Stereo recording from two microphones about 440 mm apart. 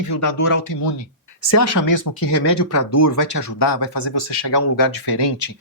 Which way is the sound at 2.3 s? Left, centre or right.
Left.